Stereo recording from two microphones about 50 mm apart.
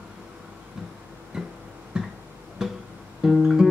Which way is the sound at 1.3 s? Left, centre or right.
Centre.